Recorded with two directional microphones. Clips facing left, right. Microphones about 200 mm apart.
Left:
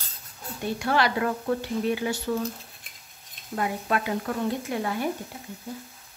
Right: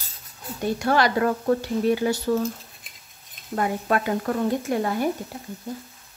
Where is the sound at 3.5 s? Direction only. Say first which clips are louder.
Right 4 dB; 45° right (ahead or behind).